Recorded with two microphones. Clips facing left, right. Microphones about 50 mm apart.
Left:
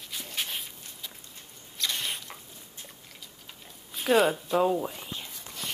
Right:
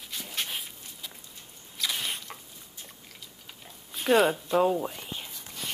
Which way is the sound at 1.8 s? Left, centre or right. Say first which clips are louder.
Even; centre.